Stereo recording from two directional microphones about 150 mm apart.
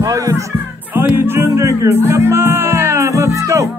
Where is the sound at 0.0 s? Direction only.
20° right (ahead or behind).